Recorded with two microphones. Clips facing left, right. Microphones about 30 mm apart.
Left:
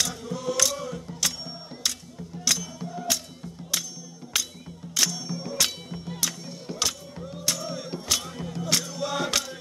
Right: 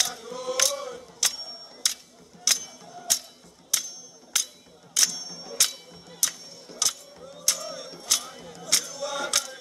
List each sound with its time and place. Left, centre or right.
0.0 s chant: centre
0.7 s music: centre
4.3 s music: centre
8.6 s choir: centre